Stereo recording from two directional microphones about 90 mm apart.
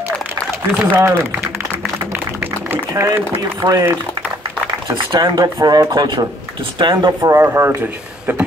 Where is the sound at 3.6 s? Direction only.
40° right (ahead or behind).